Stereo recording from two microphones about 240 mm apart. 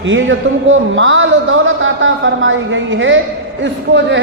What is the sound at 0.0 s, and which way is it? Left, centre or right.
A man's voice, right.